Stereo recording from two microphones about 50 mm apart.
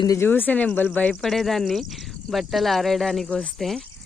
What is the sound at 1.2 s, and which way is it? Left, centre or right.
Speech, centre.